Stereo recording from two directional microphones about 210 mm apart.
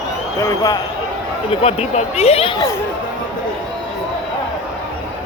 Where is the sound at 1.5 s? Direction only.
30° left (ahead or behind).